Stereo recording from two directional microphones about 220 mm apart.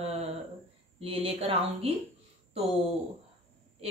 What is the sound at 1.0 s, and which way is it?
Speech, 25° right (ahead or behind).